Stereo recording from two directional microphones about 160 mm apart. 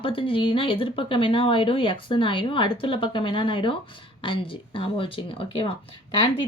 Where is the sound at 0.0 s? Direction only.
35° left (ahead or behind).